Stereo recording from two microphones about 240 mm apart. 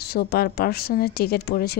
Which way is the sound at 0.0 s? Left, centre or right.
Left.